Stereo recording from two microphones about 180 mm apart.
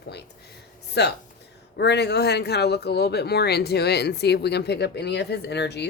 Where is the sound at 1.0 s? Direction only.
70° left (ahead or behind).